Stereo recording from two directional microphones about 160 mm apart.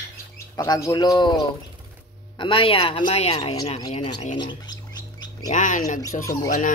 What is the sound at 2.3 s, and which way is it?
Speech, 30° left (ahead or behind).